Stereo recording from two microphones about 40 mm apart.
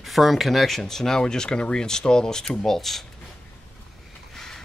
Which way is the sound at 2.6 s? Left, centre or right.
Centre.